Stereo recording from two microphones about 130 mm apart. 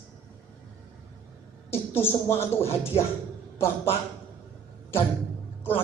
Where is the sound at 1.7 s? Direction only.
20° left (ahead or behind).